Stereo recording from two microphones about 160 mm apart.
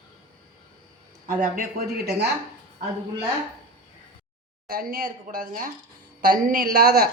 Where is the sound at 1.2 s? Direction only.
55° right (ahead or behind).